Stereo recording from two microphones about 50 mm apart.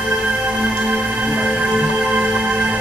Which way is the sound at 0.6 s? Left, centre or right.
Right.